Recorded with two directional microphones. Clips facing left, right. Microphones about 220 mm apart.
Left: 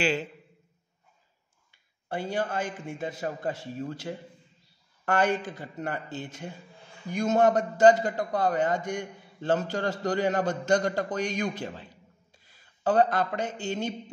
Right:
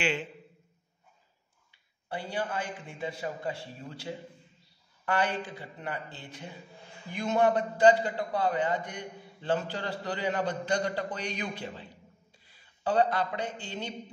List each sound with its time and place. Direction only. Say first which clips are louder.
0.0 s a man's voice: left 4 dB; 40° left (ahead or behind)
2.0 s a man's voice: left 4 dB; 45° left (ahead or behind)